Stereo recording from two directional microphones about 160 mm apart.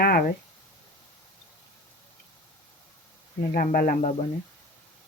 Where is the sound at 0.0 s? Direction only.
65° left (ahead or behind).